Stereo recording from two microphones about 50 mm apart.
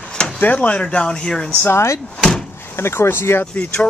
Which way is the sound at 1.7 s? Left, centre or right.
Left.